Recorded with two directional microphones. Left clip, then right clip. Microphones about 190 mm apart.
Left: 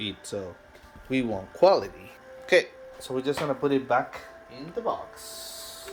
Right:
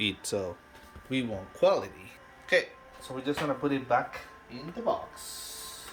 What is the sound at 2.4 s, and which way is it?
Music, 35° left (ahead or behind).